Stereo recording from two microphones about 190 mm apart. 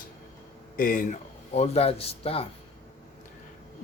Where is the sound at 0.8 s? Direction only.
45° left (ahead or behind).